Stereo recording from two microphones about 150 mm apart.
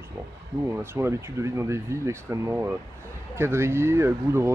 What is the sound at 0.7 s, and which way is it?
Speech, 15° right (ahead or behind).